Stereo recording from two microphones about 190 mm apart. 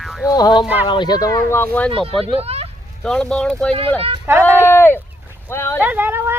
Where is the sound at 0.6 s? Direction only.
10° right (ahead or behind).